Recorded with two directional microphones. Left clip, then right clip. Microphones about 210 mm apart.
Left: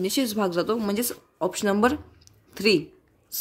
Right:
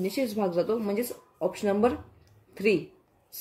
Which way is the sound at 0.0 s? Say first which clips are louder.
Left 3 dB; 45° left (ahead or behind).